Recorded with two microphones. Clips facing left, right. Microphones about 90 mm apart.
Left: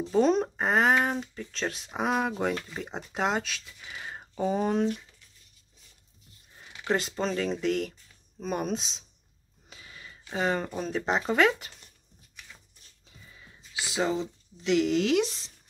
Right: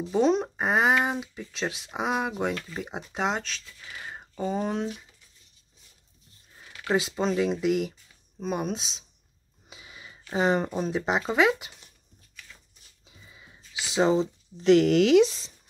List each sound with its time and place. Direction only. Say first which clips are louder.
0.0 s speech: even; centre (ahead or behind)
6.6 s a sound: right 1 dB; 15° left (ahead or behind)
6.9 s speech: right 3 dB; 5° right (ahead or behind)
9.7 s a sound: right 1 dB; 15° right (ahead or behind)
10.3 s speech: right 4 dB; 20° right (ahead or behind)
10.7 s speech: right 2 dB; 10° right (ahead or behind)
13.0 s a sound: right 1 dB; 10° right (ahead or behind)
13.9 s speech: right 6 dB; 25° right (ahead or behind)
14.6 s speech: right 6 dB; 45° right (ahead or behind)
14.9 s speech: right 5 dB; 90° right